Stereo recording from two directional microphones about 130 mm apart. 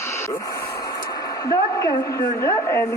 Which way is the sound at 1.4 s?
30° left (ahead or behind).